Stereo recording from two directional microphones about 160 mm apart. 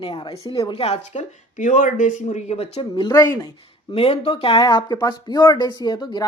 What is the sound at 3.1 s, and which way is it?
Speech, 20° left (ahead or behind).